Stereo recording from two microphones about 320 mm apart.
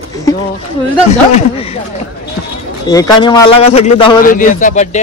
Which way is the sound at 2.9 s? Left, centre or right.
Centre.